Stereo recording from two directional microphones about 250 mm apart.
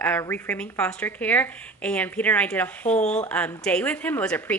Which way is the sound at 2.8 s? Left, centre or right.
Left.